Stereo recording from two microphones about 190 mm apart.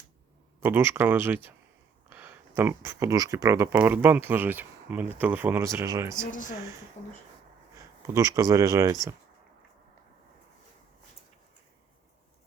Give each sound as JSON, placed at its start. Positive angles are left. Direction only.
{"t": 0.6, "sound": "speech", "side_deg": -10}
{"t": 8.0, "sound": "speech", "side_deg": -15}